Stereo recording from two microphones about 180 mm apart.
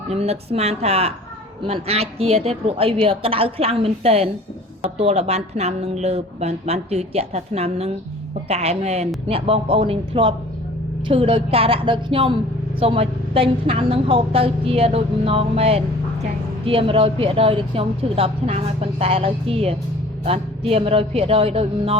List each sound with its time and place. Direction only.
0.1 s a woman's voice: 35° right (ahead or behind)